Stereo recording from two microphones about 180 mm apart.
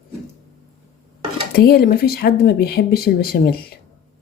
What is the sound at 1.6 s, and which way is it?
Speech, 55° left (ahead or behind).